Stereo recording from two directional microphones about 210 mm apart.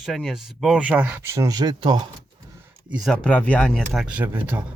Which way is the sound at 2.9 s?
Centre (ahead or behind).